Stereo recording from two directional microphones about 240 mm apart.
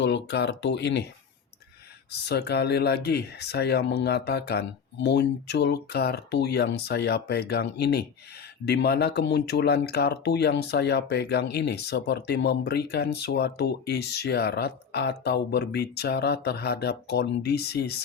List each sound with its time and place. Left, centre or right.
0.0 s speech: left
2.2 s speech: left